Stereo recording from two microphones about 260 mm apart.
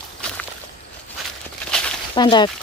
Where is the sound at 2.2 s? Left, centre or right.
Centre.